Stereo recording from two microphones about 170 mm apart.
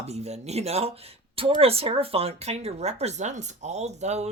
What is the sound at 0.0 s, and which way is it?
Speech, 40° right (ahead or behind).